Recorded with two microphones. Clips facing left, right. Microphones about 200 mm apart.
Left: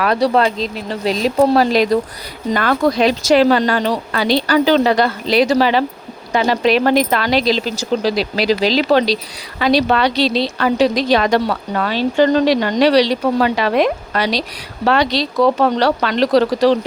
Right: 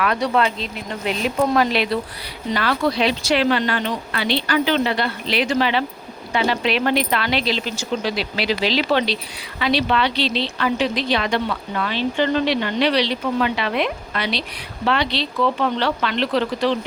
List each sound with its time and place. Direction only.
0.0 s speech: 35° left (ahead or behind)